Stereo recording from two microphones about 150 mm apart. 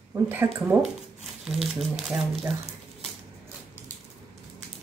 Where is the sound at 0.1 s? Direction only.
15° right (ahead or behind).